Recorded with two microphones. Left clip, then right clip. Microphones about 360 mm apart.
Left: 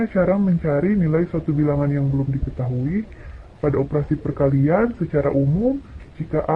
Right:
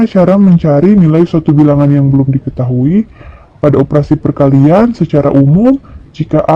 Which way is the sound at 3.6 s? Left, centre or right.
Right.